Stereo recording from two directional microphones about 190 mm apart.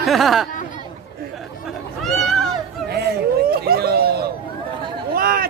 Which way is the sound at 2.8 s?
55° right (ahead or behind).